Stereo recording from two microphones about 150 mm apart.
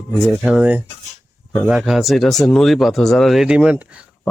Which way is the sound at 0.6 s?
10° right (ahead or behind).